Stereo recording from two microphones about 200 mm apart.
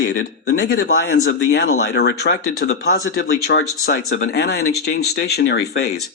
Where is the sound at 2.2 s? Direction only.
55° left (ahead or behind).